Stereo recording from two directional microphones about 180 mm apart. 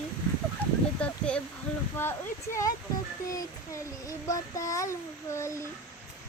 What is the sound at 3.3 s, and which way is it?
Child singing, 20° left (ahead or behind).